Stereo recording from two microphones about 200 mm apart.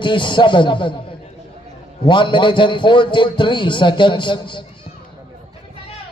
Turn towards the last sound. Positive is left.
turn(degrees=25)  # may be behind; listen again after turning